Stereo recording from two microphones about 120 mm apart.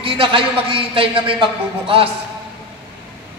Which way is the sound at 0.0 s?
45° right (ahead or behind).